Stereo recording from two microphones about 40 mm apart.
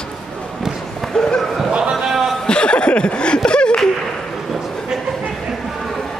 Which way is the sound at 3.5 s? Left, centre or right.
Left.